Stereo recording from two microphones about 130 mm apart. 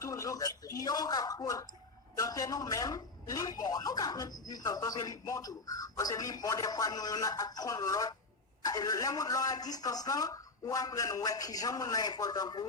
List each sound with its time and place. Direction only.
0.0 s speech: 25° left (ahead or behind)